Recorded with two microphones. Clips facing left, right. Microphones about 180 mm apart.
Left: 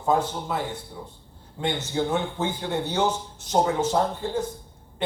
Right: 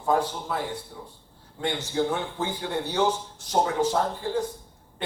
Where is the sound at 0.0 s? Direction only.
20° left (ahead or behind).